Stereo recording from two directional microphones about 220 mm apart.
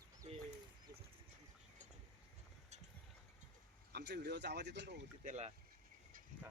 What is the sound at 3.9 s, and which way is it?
Speech, 50° right (ahead or behind).